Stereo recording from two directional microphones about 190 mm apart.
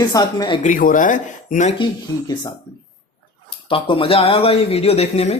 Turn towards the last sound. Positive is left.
turn(degrees=35)  # may be behind; listen again after turning